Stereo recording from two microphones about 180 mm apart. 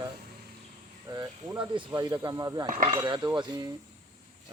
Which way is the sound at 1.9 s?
20° right (ahead or behind).